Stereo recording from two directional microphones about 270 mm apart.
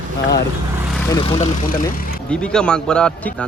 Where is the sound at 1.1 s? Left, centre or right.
Centre.